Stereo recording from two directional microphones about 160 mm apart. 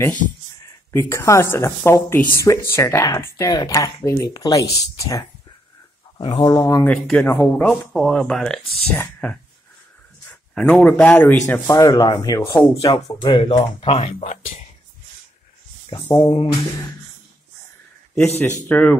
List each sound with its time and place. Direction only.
0.9 s speech: 15° left (ahead or behind)
6.9 s speech: 5° left (ahead or behind)
10.5 s speech: 5° left (ahead or behind)
11.7 s speech: 20° left (ahead or behind); by 14.4 s 40° left (ahead or behind)
15.9 s speech: 30° left (ahead or behind)
18.4 s speech: 10° left (ahead or behind)